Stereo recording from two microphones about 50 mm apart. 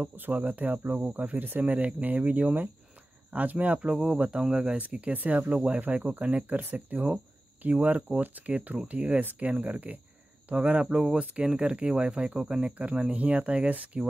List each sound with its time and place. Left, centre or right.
0.0 s speech: right
3.8 s speech: right
5.1 s speech: right
9.2 s speech: right
10.9 s speech: centre
11.4 s speech: centre